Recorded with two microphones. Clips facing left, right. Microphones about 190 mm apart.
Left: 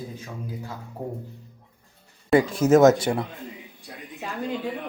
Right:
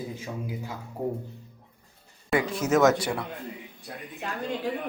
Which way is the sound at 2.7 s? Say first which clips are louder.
Left 5 dB; 25° left (ahead or behind).